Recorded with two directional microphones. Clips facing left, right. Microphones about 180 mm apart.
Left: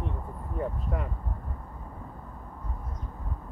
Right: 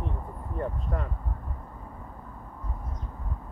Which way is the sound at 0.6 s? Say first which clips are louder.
Even; 5° left (ahead or behind).